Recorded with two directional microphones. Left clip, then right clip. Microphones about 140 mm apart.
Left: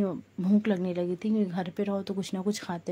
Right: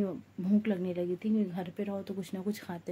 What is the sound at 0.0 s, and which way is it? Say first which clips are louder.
Speech: left 4 dB; 30° left (ahead or behind).